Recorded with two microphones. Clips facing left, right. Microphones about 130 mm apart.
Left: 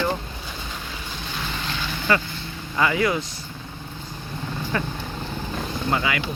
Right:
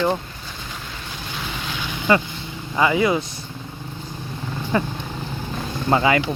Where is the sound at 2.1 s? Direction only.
20° right (ahead or behind).